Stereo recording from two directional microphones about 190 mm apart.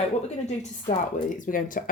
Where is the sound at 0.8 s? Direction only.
45° left (ahead or behind).